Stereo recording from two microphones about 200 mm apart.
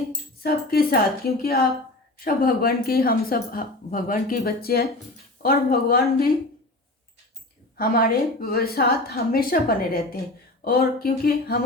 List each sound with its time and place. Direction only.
0.4 s a woman's voice: 50° left (ahead or behind)
7.8 s a woman's voice: 45° left (ahead or behind)